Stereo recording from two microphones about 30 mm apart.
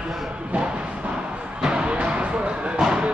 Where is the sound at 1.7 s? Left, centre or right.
Right.